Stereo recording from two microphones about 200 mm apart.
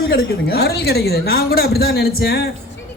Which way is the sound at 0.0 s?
50° left (ahead or behind).